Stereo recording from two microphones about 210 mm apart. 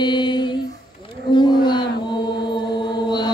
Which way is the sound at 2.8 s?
20° left (ahead or behind).